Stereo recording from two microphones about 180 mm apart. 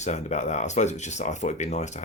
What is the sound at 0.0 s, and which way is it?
Speech, 40° left (ahead or behind).